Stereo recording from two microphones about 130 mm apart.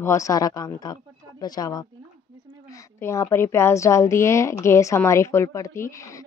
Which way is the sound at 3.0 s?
20° left (ahead or behind).